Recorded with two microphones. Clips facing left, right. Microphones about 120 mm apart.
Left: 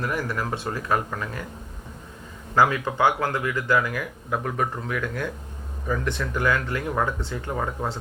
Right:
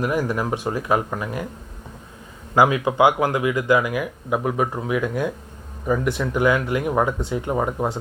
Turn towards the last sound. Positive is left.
turn(degrees=-15)  # may be behind; listen again after turning